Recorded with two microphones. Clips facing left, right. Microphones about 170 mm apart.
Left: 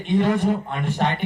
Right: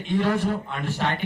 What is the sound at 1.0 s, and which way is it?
Speech, 50° left (ahead or behind).